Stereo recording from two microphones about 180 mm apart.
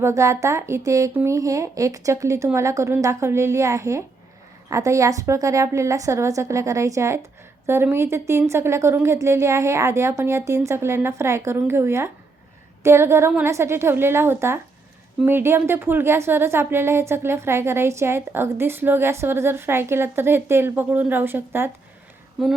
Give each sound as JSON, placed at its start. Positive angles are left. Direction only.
{"t": 0.0, "sound": "a woman's voice", "side_deg": -15}